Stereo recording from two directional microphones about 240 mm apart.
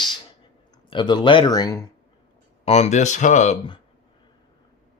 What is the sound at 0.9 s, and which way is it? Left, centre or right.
Speech, centre.